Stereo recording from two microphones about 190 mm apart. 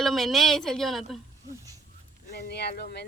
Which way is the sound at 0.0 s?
Centre (ahead or behind).